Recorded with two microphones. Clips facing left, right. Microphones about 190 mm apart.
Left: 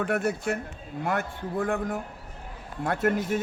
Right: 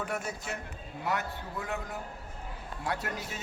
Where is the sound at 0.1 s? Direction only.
60° left (ahead or behind).